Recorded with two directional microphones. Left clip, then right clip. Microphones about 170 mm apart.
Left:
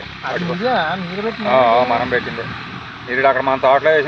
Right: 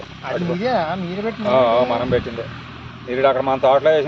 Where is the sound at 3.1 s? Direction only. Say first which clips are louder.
Left 2 dB; 70° right (ahead or behind).